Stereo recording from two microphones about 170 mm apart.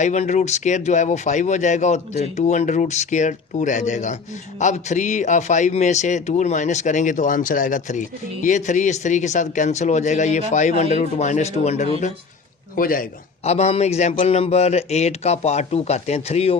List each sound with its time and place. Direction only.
0.0 s a man's voice: 45° left (ahead or behind)
12.7 s a man's voice: 55° left (ahead or behind)
13.4 s a man's voice: 40° left (ahead or behind)